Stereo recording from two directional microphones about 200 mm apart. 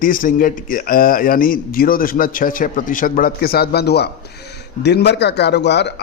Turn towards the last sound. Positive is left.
turn(degrees=60)  # may be behind; listen again after turning